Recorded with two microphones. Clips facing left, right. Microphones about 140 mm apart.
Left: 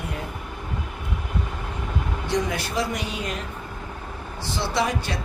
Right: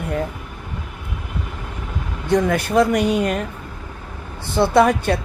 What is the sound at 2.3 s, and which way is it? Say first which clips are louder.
Speech: right 9 dB; 55° right (ahead or behind).